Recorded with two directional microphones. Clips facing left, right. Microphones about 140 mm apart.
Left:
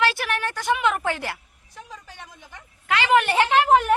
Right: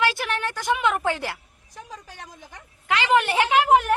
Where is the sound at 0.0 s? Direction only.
15° right (ahead or behind).